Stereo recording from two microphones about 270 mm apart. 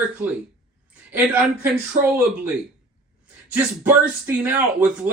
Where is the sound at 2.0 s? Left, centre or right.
Right.